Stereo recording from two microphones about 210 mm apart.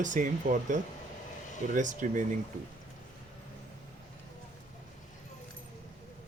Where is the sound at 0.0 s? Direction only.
35° right (ahead or behind).